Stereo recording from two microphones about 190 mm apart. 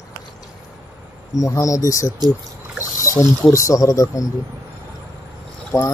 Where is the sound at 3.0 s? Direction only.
15° left (ahead or behind).